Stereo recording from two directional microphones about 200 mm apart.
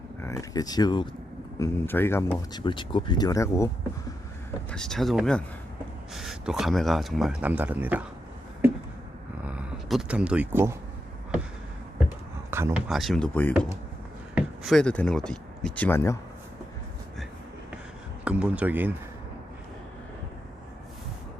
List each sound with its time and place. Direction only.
0.2 s speech: 15° left (ahead or behind)
4.7 s speech: 5° left (ahead or behind)
9.4 s speech: 5° right (ahead or behind)
12.5 s a sound: 10° right (ahead or behind)
12.9 s speech: centre (ahead or behind)
18.3 s speech: 5° right (ahead or behind)